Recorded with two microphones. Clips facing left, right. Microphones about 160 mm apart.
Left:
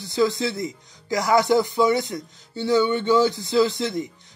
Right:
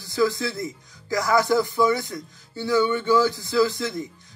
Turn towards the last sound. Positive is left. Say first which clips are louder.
# left 2 dB
turn(degrees=20)  # may be behind; listen again after turning